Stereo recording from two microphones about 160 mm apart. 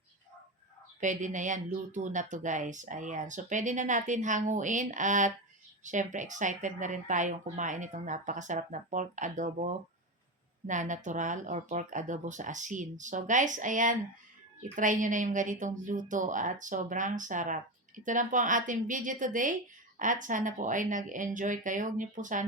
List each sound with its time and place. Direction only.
1.0 s a woman's voice: 50° right (ahead or behind)